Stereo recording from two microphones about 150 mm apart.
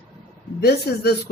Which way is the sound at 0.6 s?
90° left.